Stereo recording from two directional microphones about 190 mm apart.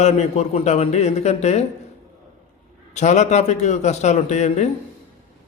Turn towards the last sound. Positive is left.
turn(degrees=40)  # may be behind; listen again after turning